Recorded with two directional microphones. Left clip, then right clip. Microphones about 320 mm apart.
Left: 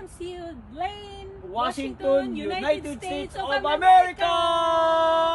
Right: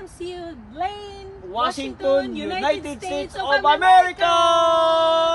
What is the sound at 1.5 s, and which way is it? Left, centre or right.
Speech, centre.